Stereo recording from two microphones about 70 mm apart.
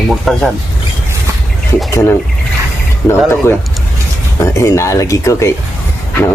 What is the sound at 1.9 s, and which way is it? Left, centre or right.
Speech, left.